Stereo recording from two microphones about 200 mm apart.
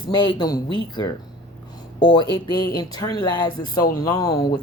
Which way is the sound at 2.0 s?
20° left (ahead or behind).